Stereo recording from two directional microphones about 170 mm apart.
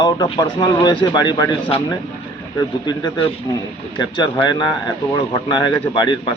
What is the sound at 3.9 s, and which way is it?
Speech, 25° left (ahead or behind).